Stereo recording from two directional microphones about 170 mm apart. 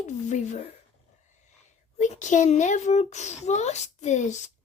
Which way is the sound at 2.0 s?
45° left (ahead or behind).